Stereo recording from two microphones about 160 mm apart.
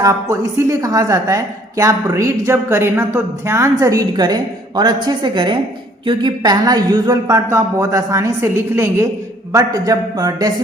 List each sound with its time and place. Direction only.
0.0 s a woman's voice: 20° right (ahead or behind)